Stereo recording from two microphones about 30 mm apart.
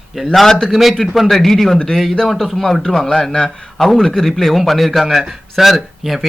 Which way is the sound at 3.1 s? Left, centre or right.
Left.